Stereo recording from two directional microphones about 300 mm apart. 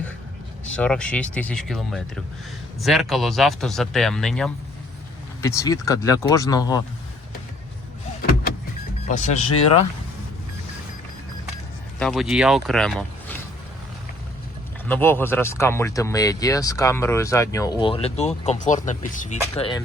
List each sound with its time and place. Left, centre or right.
0.6 s speech: centre
9.0 s speech: left
11.9 s speech: centre
14.8 s speech: centre